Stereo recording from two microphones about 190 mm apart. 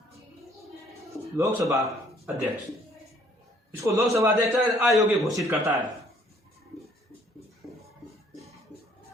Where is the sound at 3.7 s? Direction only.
15° right (ahead or behind).